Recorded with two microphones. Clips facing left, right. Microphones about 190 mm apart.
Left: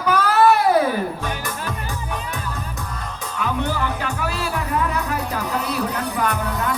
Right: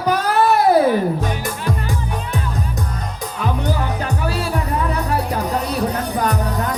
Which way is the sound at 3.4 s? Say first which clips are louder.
Right 1 dB; 35° right (ahead or behind).